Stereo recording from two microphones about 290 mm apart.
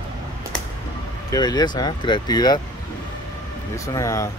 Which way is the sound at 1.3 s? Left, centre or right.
Centre.